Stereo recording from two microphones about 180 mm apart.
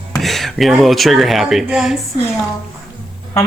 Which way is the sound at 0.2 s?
Centre (ahead or behind).